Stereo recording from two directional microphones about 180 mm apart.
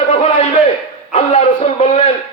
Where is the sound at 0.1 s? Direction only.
35° left (ahead or behind).